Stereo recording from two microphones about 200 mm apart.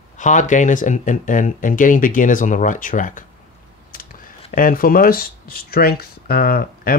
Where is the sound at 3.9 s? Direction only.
45° left (ahead or behind).